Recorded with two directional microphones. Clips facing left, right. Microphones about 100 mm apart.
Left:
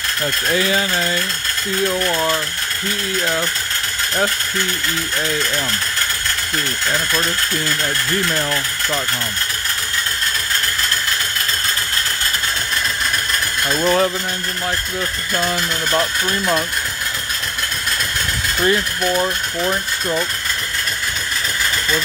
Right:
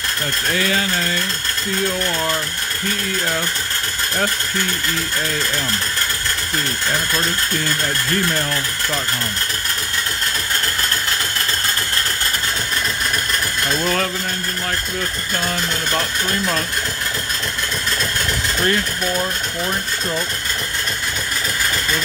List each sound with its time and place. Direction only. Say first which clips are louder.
0.6 s mechanisms: left 1 dB; 20° left (ahead or behind)
2.0 s speech: left 3 dB; 15° left (ahead or behind)
8.4 s speech: left 1 dB; 15° left (ahead or behind)
13.8 s mechanisms: left 7 dB; 20° left (ahead or behind)
18.7 s speech: left 5 dB; 10° left (ahead or behind)